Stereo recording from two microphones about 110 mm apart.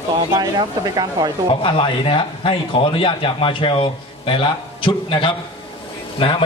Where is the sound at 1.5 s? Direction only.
55° left (ahead or behind).